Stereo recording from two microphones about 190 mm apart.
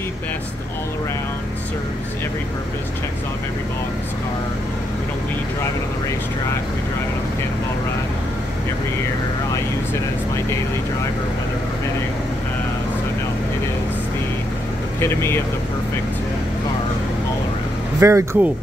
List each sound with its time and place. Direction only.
15.0 s speech: 15° left (ahead or behind)
18.0 s speech: 15° right (ahead or behind)